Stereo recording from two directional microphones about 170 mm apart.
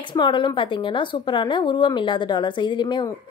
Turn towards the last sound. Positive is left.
turn(degrees=25)  # may be behind; listen again after turning